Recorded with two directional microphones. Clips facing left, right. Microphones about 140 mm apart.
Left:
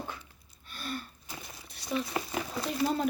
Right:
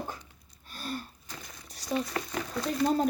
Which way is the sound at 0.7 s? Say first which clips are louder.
Right 1 dB; 40° right (ahead or behind).